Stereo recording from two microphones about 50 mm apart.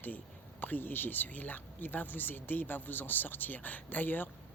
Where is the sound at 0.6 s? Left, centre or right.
Left.